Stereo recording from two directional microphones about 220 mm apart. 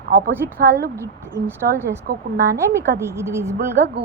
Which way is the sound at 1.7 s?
10° right (ahead or behind).